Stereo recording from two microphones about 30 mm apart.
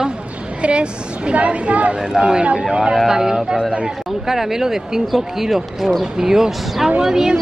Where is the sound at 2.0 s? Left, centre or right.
Right; by 6.1 s centre.